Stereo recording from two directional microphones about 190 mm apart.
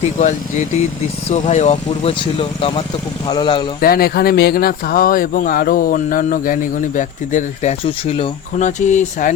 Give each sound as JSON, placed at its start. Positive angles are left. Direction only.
{"t": 0.2, "sound": "speech", "side_deg": 40}
{"t": 2.4, "sound": "speech", "side_deg": 25}
{"t": 3.8, "sound": "speech", "side_deg": 50}